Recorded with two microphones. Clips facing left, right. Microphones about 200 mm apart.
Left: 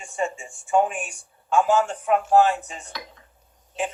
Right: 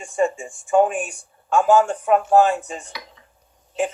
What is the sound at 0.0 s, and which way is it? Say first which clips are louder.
Speech: right 7 dB; 50° right (ahead or behind).